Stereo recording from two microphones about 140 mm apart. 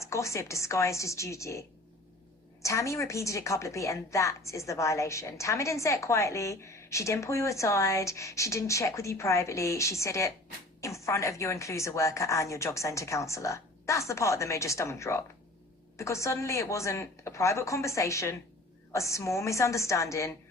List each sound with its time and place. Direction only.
0.0 s a woman's voice: 20° left (ahead or behind)